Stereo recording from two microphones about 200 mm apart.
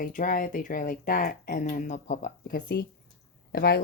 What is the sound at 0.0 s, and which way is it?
Speech, 40° left (ahead or behind).